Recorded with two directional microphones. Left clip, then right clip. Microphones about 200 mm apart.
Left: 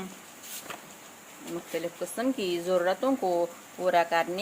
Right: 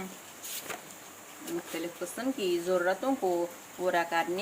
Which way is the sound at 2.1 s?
45° left (ahead or behind).